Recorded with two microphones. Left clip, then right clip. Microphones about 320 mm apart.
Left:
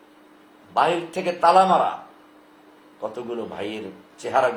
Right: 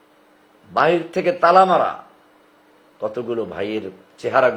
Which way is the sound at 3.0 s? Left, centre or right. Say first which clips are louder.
Right 6 dB; right.